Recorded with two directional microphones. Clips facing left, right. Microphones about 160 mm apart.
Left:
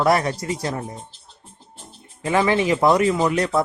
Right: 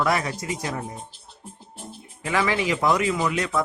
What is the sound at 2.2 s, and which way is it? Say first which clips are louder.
Speech: left 5 dB; 30° left (ahead or behind).